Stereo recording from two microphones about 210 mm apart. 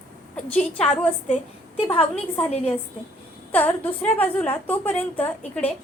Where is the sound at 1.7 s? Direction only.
25° left (ahead or behind).